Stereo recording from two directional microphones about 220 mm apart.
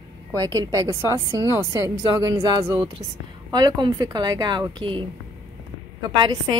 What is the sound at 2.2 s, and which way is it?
A woman's voice, 15° right (ahead or behind).